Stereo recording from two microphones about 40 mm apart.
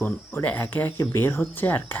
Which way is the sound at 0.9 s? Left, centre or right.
Left.